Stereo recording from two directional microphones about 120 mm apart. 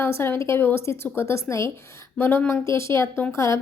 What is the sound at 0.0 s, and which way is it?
Speech, 20° left (ahead or behind).